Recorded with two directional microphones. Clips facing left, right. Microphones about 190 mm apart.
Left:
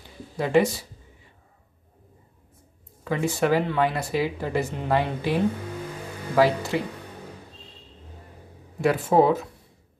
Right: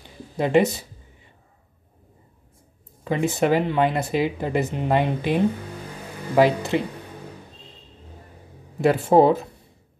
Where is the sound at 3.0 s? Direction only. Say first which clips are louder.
Right 2 dB; 20° right (ahead or behind).